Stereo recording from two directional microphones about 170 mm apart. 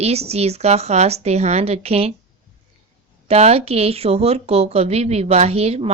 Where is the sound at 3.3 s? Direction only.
35° right (ahead or behind).